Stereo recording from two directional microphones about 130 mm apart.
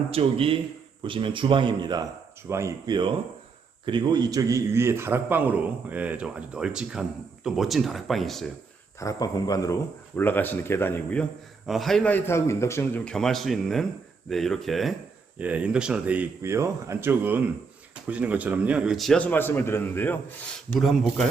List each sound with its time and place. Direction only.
0.1 s a man's voice: 50° right (ahead or behind)
2.5 s speech: 20° right (ahead or behind)
3.8 s a man's voice: 35° right (ahead or behind); by 8.4 s centre (ahead or behind)
9.0 s a man's voice: 25° left (ahead or behind)
10.2 s speech: 15° left (ahead or behind)
11.6 s a man's voice: centre (ahead or behind)
12.1 s a man's voice: 20° left (ahead or behind)
13.1 s a man's voice: centre (ahead or behind)
15.4 s a man's voice: 10° right (ahead or behind); by 20.1 s 15° left (ahead or behind)
20.7 s a man's voice: centre (ahead or behind)